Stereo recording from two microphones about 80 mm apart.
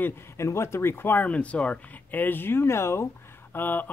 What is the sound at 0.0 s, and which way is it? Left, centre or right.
Speech, left.